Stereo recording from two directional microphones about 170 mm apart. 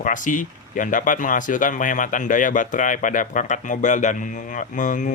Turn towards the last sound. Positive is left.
turn(degrees=50)  # may be behind; listen again after turning